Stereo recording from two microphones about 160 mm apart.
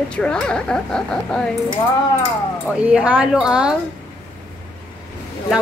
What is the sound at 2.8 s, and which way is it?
Speech, 5° right (ahead or behind).